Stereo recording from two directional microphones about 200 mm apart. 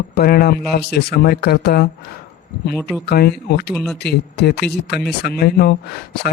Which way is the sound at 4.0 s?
55° left (ahead or behind).